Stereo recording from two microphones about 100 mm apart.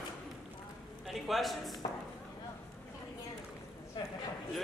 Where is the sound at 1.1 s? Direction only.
Centre (ahead or behind).